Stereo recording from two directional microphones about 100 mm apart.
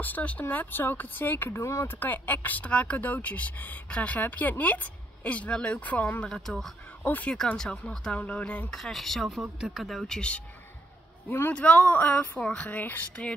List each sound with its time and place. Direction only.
0.0 s speech: 15° left (ahead or behind)
7.1 s speech: 15° left (ahead or behind)
7.3 s speech: 5° left (ahead or behind)
11.2 s speech: 20° left (ahead or behind)